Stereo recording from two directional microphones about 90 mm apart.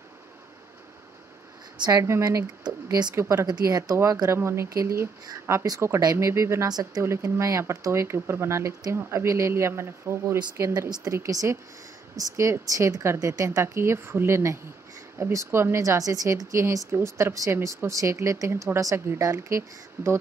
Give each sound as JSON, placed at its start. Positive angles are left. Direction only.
{"t": 1.9, "sound": "a woman's voice", "side_deg": -35}
{"t": 2.6, "sound": "speech", "side_deg": -50}
{"t": 3.2, "sound": "speech", "side_deg": -30}
{"t": 3.4, "sound": "a woman's voice", "side_deg": -45}
{"t": 6.7, "sound": "speech", "side_deg": -45}
{"t": 7.0, "sound": "a woman's voice", "side_deg": -30}